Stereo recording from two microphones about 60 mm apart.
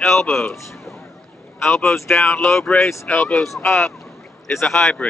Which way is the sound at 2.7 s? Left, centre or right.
Left.